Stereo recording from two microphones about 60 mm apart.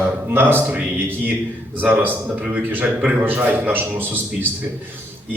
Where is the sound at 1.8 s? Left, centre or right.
Right.